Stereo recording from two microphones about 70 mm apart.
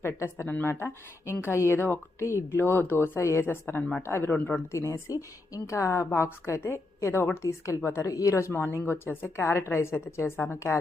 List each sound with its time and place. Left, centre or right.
0.0 s speech: left
0.4 s speech: left
3.8 s speech: centre
4.0 s speech: left
4.3 s speech: left
4.7 s a woman's voice: left
7.4 s a woman's voice: left
8.1 s a woman's voice: left